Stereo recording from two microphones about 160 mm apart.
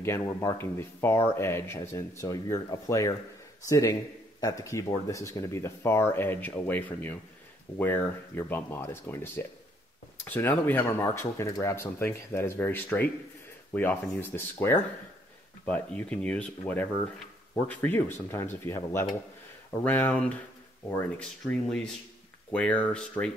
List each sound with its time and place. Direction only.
0.0 s speech: 15° left (ahead or behind)